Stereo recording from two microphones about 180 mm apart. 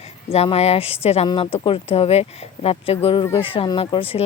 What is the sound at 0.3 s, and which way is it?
Speech, 35° left (ahead or behind).